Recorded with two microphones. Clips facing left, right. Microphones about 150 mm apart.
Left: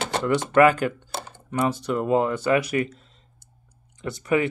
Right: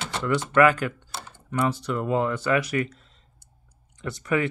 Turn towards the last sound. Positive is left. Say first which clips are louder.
# left 2 dB
turn(degrees=20)  # may be behind; listen again after turning